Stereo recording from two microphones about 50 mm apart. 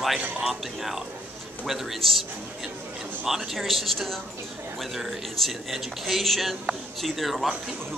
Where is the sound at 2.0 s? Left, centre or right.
Centre.